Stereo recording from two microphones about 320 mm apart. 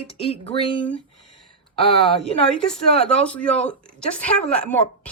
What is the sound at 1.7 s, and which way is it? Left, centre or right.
Speech, centre.